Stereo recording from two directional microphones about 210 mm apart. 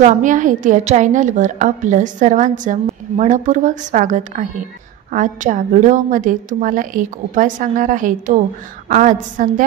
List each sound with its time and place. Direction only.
0.0 s a woman's voice: 35° right (ahead or behind)